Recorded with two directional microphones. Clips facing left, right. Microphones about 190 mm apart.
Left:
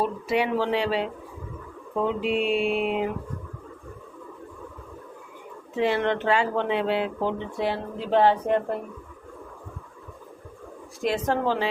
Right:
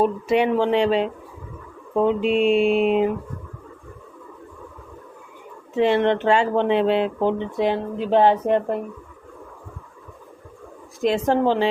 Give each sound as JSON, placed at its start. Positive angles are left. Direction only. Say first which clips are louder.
{"t": 0.0, "sound": "speech", "louder": "right 6 dB", "side_deg": -25}
{"t": 5.8, "sound": "speech", "louder": "right 5 dB", "side_deg": -25}
{"t": 11.0, "sound": "speech", "louder": "right 5 dB", "side_deg": -25}